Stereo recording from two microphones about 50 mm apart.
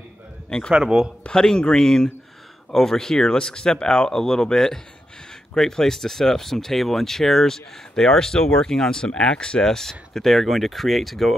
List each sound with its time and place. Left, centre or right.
0.5 s a man's voice: centre
0.7 s speech: centre
1.2 s speech: centre